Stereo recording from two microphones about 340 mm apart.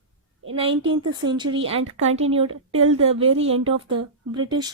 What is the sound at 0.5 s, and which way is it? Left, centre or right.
A woman's voice, centre.